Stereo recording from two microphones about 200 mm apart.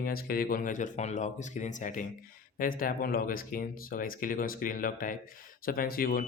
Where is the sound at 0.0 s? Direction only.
50° left (ahead or behind).